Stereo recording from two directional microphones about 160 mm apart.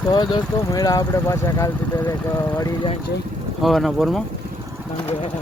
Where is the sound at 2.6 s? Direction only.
25° left (ahead or behind).